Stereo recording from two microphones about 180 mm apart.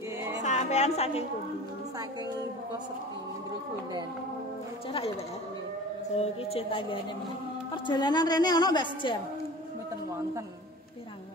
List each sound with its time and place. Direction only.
0.4 s a woman's voice: 40° left (ahead or behind)
6.1 s a woman's voice: 30° left (ahead or behind)